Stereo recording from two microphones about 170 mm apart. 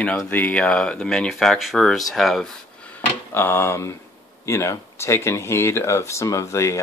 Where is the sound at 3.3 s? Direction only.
15° left (ahead or behind).